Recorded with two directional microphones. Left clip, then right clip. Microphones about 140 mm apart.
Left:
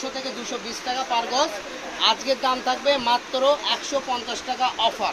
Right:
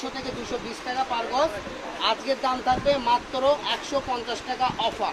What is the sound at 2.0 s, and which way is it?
Speech, 85° left.